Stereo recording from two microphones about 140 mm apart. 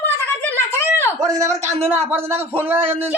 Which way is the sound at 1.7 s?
15° right (ahead or behind).